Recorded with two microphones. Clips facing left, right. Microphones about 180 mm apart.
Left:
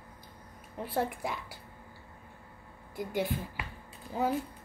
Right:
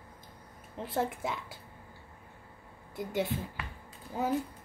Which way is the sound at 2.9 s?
20° right (ahead or behind).